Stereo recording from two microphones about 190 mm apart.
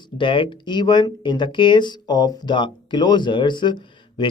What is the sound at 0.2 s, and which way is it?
Speech, 25° left (ahead or behind).